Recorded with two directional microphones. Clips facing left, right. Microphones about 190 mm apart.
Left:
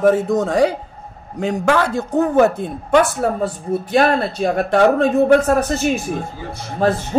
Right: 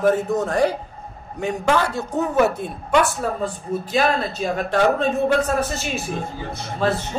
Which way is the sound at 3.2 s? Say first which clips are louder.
Left 5 dB; 65° left (ahead or behind).